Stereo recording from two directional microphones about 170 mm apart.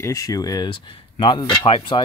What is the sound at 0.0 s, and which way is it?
Speech, 20° left (ahead or behind).